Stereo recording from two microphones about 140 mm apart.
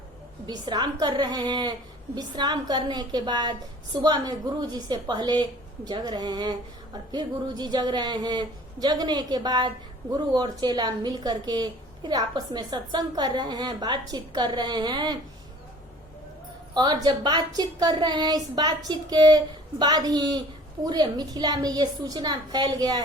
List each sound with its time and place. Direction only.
0.4 s a woman's voice: 30° right (ahead or behind)
16.7 s speech: 30° right (ahead or behind)